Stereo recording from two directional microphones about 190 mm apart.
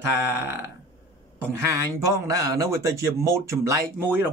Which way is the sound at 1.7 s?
15° right (ahead or behind).